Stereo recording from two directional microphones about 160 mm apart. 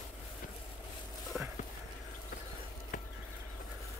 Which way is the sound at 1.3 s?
10° right (ahead or behind).